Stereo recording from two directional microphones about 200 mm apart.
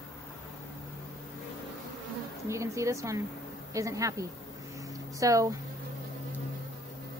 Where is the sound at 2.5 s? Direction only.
15° right (ahead or behind).